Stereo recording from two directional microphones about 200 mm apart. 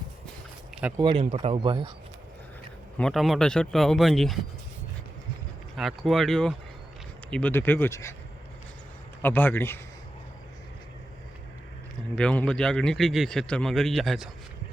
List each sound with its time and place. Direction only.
0.8 s speech: 5° right (ahead or behind)
1.0 s speech: 30° right (ahead or behind)
3.0 s a man's voice: centre (ahead or behind)
5.7 s a man's voice: centre (ahead or behind)
9.2 s speech: 10° left (ahead or behind)
12.1 s a man's voice: 5° left (ahead or behind)